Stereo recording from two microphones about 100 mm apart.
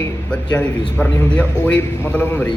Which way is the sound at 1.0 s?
15° left (ahead or behind).